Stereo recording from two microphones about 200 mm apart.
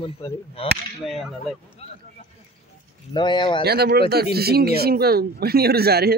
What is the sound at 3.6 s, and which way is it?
Speech, 55° right (ahead or behind).